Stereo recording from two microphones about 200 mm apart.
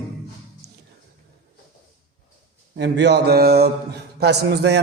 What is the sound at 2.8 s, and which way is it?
A man's voice, 60° right (ahead or behind).